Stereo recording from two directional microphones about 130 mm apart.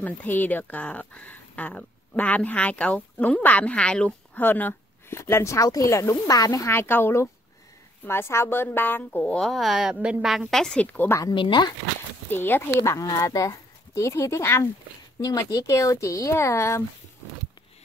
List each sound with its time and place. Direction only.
0.0 s speech: 15° left (ahead or behind)
11.3 s speech: 40° left (ahead or behind)
12.3 s speech: 15° left (ahead or behind)